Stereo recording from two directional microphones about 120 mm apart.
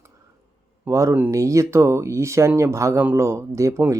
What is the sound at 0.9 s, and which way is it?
Speech, 25° right (ahead or behind).